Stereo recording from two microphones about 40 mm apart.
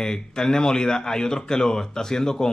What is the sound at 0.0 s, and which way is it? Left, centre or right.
Speech, centre.